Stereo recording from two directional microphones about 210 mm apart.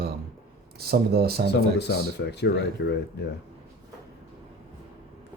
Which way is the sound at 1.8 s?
55° left (ahead or behind).